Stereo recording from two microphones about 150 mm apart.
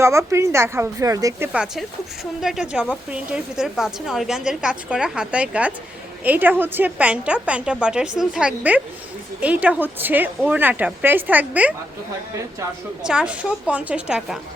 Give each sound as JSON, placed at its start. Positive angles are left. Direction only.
{"t": 0.0, "sound": "a woman's voice", "side_deg": -20}
{"t": 1.5, "sound": "a woman's voice", "side_deg": -5}
{"t": 13.0, "sound": "a woman's voice", "side_deg": -5}